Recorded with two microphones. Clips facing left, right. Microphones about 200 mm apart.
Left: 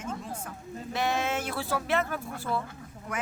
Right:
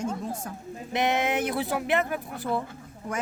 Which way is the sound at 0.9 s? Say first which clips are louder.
Right 4 dB; 20° right (ahead or behind).